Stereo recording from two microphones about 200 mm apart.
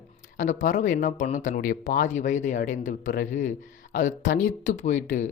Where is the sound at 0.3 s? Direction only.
40° left (ahead or behind).